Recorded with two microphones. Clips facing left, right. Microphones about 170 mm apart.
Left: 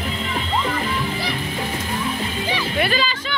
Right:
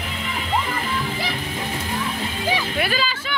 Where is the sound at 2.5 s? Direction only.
10° right (ahead or behind).